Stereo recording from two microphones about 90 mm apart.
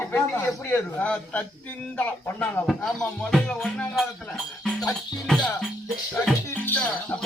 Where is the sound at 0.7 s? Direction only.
15° left (ahead or behind).